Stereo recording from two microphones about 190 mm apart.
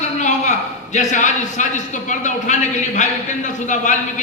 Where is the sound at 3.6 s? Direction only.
40° left (ahead or behind).